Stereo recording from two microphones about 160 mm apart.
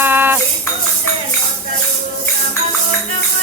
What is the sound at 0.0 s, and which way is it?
Cutlery, 10° right (ahead or behind).